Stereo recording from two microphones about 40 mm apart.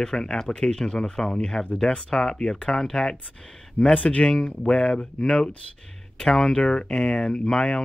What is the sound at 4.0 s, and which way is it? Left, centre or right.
Speech, left.